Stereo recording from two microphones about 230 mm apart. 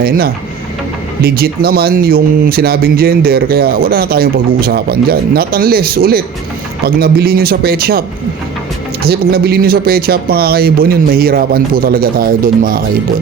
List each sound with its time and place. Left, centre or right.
1.2 s speech: right
9.0 s speech: right